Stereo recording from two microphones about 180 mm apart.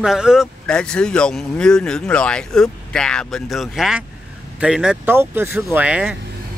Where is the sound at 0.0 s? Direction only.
5° right (ahead or behind).